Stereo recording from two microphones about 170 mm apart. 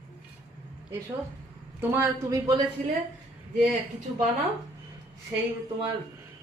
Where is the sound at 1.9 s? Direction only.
20° right (ahead or behind).